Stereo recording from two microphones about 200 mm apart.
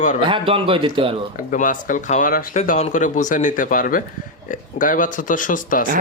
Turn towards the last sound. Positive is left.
turn(degrees=40)  # may be behind; listen again after turning